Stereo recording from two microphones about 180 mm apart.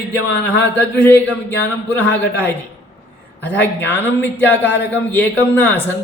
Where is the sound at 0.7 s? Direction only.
10° left (ahead or behind).